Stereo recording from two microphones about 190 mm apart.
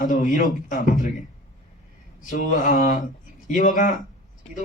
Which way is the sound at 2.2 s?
45° left (ahead or behind).